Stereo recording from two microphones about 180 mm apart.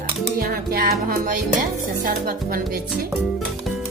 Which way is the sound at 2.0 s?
50° right (ahead or behind).